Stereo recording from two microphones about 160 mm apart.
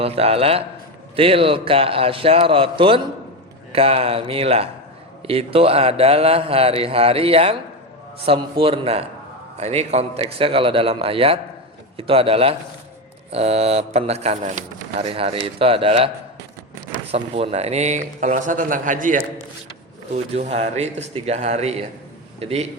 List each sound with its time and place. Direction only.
0.0 s a man's voice: 40° right (ahead or behind); by 19.2 s 55° right (ahead or behind)
20.1 s a man's voice: 40° right (ahead or behind)